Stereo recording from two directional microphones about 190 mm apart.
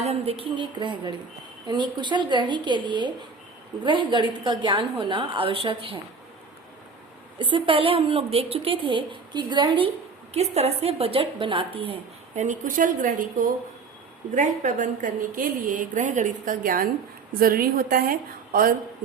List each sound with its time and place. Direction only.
0.0 s a woman's voice: 30° right (ahead or behind)
7.5 s a woman's voice: 25° right (ahead or behind)
12.4 s a woman's voice: 45° right (ahead or behind)